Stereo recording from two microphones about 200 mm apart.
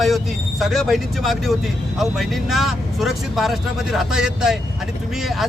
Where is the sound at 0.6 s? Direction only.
Centre (ahead or behind).